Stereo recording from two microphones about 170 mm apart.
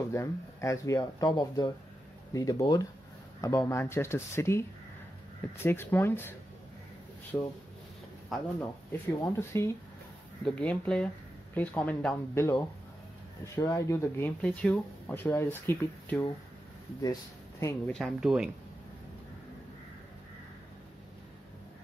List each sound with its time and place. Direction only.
0.1 s speech: 15° left (ahead or behind)
7.3 s speech: 15° left (ahead or behind)
8.3 s speech: centre (ahead or behind)
9.4 s speech: 15° left (ahead or behind)
12.4 s speech: 15° left (ahead or behind)
17.9 s speech: centre (ahead or behind)